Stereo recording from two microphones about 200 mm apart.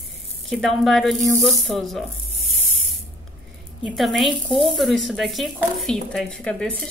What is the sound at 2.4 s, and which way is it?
Spray, 35° right (ahead or behind).